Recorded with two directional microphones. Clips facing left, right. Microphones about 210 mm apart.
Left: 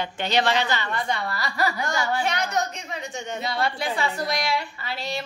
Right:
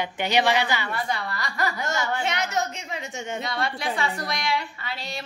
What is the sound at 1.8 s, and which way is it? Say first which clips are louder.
A woman's voice: left 1 dB; 25° right (ahead or behind).